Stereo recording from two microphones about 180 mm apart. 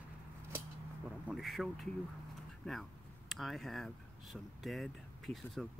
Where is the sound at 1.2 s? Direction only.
Centre (ahead or behind).